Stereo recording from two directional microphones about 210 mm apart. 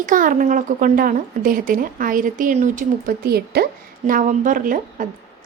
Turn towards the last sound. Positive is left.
turn(degrees=-40)  # may be behind; listen again after turning